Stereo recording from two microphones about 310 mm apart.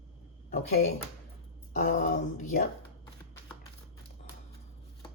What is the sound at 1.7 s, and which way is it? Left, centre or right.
Speech, left.